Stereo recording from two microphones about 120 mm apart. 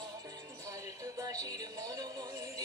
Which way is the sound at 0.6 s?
25° right (ahead or behind).